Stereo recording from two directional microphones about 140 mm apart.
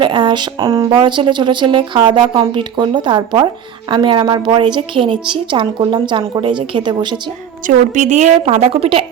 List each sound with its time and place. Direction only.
0.0 s speech: 35° right (ahead or behind)
7.7 s a woman's voice: 60° right (ahead or behind); by 9.0 s 40° right (ahead or behind)